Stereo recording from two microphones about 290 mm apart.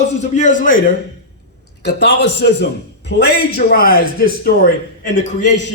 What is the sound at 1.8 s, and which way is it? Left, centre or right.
A man's voice, left.